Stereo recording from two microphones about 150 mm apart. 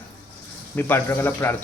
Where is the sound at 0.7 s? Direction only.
15° left (ahead or behind).